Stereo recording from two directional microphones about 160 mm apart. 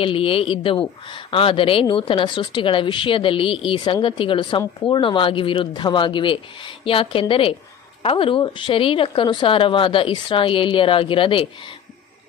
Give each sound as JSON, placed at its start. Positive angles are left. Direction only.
{"t": 0.0, "sound": "speech", "side_deg": 35}